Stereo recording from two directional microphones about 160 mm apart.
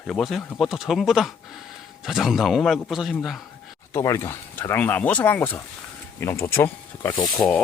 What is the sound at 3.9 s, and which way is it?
Speech, 20° left (ahead or behind).